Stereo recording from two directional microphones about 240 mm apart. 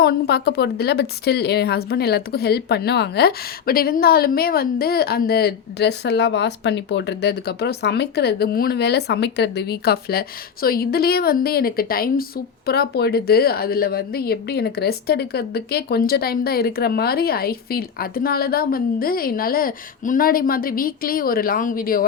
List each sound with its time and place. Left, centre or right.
0.0 s a woman's voice: left